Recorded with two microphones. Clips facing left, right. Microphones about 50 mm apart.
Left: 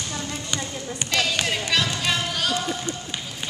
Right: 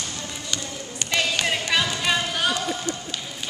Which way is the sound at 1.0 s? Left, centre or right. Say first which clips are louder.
Even; centre.